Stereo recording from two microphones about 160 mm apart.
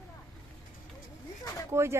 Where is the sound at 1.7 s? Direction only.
15° right (ahead or behind).